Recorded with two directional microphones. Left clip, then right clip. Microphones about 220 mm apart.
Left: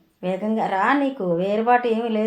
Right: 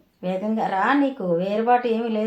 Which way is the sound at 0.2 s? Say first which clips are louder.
Left 1 dB; 30° left (ahead or behind).